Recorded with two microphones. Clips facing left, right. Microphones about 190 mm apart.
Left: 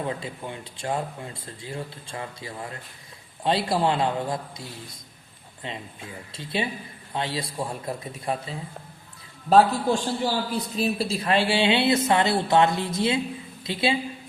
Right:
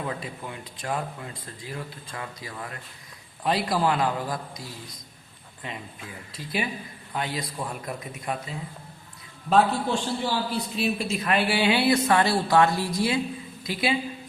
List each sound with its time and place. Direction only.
0.1 s speech: 30° left (ahead or behind)
5.6 s a man's voice: 25° left (ahead or behind)